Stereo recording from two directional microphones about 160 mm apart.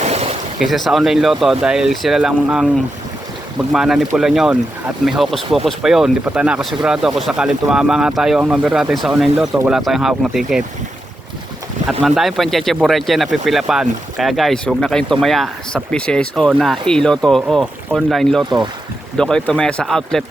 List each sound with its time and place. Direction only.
0.0 s a sound: 40° right (ahead or behind)
0.6 s speech: centre (ahead or behind)
3.7 s speech: 5° right (ahead or behind)
11.9 s speech: centre (ahead or behind)